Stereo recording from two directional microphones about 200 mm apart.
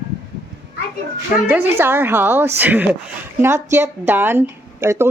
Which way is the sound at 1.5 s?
10° right (ahead or behind).